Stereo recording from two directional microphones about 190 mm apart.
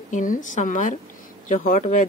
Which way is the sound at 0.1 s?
45° left (ahead or behind).